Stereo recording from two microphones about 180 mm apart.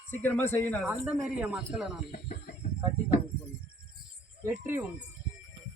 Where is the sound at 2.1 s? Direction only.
50° left (ahead or behind).